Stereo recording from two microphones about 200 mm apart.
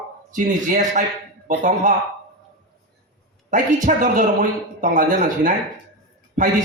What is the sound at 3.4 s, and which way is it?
A man's voice, 40° right (ahead or behind).